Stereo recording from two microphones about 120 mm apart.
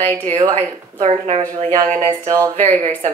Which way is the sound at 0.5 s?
70° right (ahead or behind).